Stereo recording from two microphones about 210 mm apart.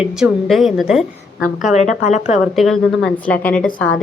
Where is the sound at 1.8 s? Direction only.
35° left (ahead or behind).